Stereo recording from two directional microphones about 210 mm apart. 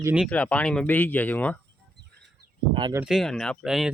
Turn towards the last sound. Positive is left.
turn(degrees=0)  # may be behind; listen again after turning